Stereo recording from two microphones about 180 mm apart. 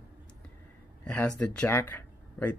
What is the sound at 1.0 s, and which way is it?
Speech, 5° left (ahead or behind).